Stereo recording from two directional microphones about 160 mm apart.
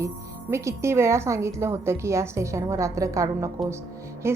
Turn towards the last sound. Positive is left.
turn(degrees=-15)  # may be behind; listen again after turning